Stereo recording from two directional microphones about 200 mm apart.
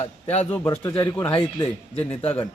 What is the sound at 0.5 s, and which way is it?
Speech, 10° left (ahead or behind).